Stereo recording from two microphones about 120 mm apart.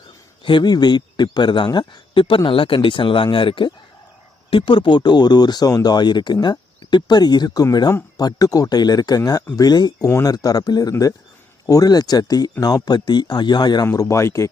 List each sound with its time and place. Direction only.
0.4 s speech: 40° left (ahead or behind)
10.1 s speech: 20° left (ahead or behind)
10.3 s speech: 35° left (ahead or behind)
13.8 s speech: 25° left (ahead or behind)